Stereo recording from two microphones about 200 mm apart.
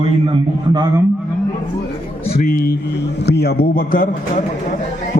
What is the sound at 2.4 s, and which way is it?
A man's voice, 50° left (ahead or behind).